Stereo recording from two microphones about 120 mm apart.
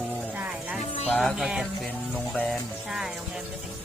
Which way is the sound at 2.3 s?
5° left (ahead or behind).